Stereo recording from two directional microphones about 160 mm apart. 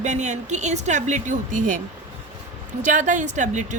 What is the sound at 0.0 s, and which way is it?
Speech, 50° right (ahead or behind).